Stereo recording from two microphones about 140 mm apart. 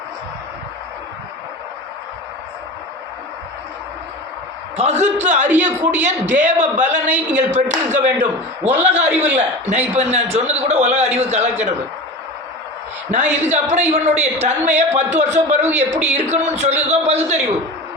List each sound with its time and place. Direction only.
4.8 s a man's voice: 55° right (ahead or behind)
13.1 s a man's voice: 55° right (ahead or behind)